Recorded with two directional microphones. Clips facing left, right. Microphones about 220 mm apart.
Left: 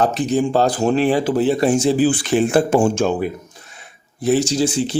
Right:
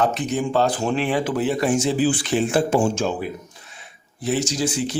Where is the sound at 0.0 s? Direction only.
35° left (ahead or behind).